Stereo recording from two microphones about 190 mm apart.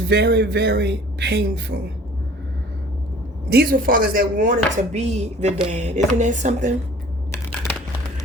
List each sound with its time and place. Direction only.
0.1 s speech: 60° right (ahead or behind)
3.5 s speech: 55° right (ahead or behind)